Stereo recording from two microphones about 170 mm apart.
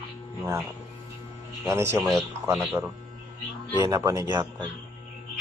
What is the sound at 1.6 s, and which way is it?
Speech, 15° right (ahead or behind).